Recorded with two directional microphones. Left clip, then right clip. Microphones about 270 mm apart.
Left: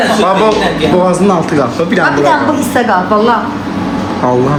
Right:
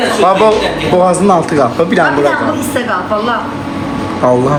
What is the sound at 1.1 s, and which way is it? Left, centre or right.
Speech, centre.